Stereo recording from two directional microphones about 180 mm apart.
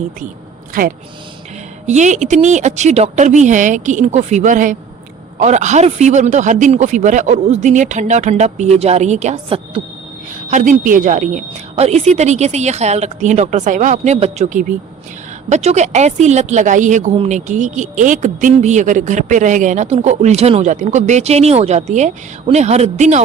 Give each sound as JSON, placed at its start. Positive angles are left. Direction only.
{"t": 0.7, "sound": "speech", "side_deg": -50}
{"t": 10.5, "sound": "speech", "side_deg": -45}